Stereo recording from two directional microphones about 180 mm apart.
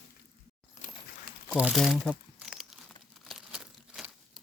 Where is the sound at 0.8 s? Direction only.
40° left (ahead or behind).